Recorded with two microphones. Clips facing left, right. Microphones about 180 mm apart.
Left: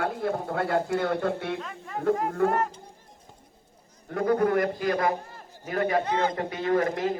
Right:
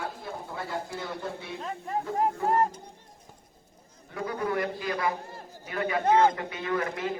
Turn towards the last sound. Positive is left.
turn(degrees=40)  # may be behind; listen again after turning